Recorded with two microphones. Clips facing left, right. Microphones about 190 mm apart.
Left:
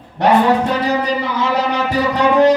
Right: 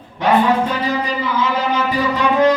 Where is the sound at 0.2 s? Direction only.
75° left (ahead or behind).